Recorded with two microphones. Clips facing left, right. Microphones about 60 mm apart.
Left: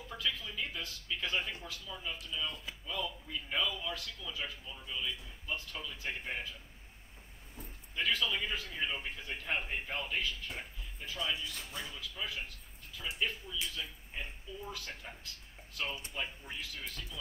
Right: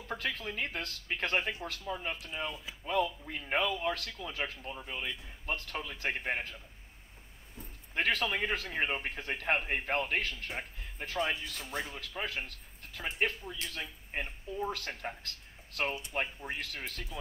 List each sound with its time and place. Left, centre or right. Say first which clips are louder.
0.1 s speech: right 3 dB; right
7.9 s speech: right 3 dB; right